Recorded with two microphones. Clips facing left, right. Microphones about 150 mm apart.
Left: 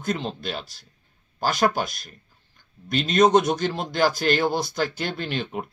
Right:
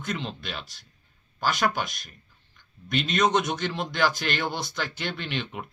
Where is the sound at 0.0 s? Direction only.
40° left (ahead or behind).